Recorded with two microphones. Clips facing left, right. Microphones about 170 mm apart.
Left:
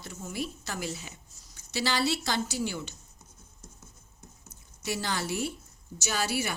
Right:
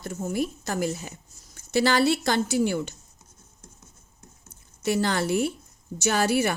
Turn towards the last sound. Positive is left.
turn(degrees=-55)  # may be behind; listen again after turning